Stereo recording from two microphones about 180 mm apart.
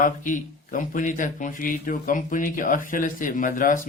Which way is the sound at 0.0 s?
45° left (ahead or behind).